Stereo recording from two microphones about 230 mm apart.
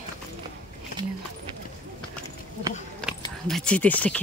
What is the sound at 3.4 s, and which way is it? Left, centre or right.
Speech, centre.